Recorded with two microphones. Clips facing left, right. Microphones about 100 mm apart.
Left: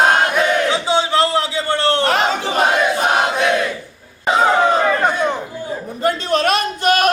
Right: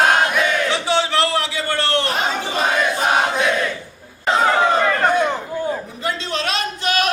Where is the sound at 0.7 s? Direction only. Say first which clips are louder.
Left 2 dB; 20° left (ahead or behind).